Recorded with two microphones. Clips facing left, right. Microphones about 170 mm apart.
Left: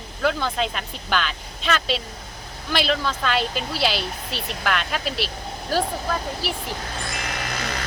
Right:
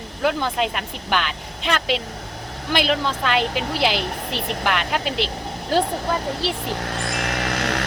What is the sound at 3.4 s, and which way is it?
Speech, 65° right (ahead or behind).